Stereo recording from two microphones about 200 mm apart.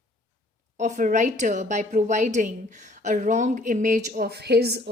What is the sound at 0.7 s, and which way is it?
A woman's voice, 40° right (ahead or behind).